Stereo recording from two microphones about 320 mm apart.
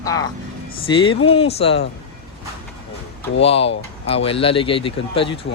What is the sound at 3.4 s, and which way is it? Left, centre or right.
Speech, centre.